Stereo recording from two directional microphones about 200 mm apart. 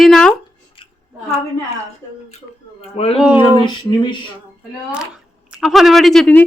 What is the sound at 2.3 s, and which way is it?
Speech, 30° left (ahead or behind).